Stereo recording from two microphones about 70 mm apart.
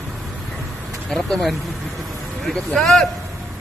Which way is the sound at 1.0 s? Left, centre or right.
Centre.